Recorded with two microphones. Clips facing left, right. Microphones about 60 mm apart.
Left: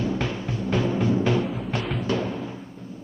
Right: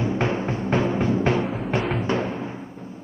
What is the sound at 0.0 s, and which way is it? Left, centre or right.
Timpani, right.